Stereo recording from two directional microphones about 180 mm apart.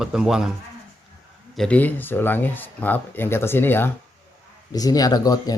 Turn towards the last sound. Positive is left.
turn(degrees=20)  # may be behind; listen again after turning